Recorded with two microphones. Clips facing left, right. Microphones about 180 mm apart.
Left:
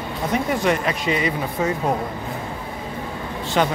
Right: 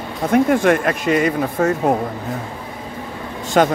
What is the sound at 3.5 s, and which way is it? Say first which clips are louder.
Speech: right 6 dB; 45° right (ahead or behind).